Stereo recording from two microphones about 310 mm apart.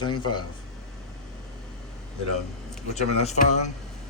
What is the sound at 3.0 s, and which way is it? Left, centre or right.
Speech, left.